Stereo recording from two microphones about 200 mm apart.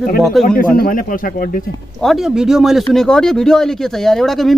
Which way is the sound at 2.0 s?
Centre (ahead or behind).